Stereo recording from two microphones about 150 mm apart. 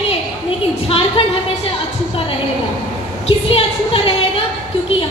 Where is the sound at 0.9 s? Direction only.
35° left (ahead or behind).